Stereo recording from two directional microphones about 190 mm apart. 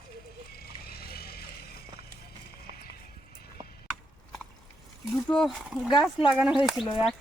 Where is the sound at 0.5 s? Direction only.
55° left (ahead or behind).